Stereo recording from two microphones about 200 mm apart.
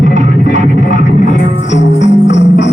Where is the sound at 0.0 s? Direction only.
65° left (ahead or behind).